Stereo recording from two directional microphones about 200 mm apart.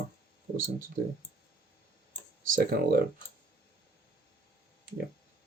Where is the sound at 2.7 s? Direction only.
50° right (ahead or behind).